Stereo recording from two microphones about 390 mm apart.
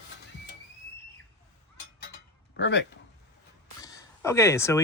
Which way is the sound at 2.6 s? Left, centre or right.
Left.